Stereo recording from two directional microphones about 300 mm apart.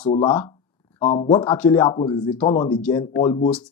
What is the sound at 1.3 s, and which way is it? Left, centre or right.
Speech, centre.